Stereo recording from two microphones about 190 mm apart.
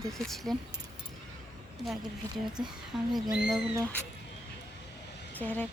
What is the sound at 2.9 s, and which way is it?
Speech, 5° right (ahead or behind).